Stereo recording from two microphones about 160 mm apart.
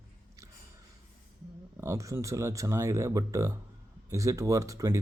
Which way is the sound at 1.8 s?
20° right (ahead or behind).